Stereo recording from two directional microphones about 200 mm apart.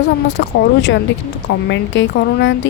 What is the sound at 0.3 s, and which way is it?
A woman's voice, 65° left (ahead or behind).